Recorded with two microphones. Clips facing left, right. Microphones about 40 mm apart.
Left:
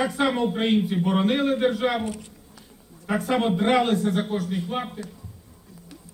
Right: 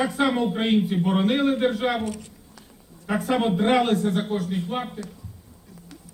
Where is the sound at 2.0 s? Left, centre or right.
Left.